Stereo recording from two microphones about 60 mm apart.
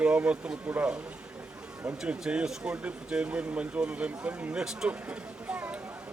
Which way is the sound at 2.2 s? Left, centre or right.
Centre.